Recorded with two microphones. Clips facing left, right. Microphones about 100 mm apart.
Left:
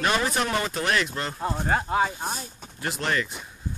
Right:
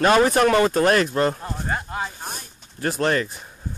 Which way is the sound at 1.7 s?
20° left (ahead or behind).